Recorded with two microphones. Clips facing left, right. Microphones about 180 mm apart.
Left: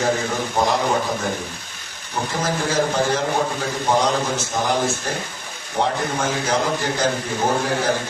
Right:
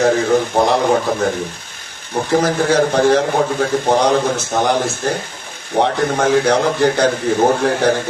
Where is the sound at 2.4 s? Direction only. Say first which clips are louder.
Right 4 dB; 65° right (ahead or behind).